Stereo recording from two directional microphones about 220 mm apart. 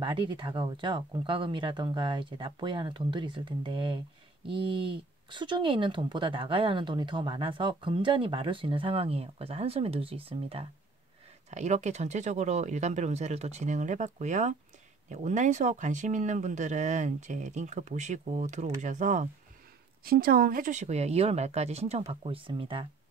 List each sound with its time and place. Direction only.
0.0 s speech: 20° right (ahead or behind)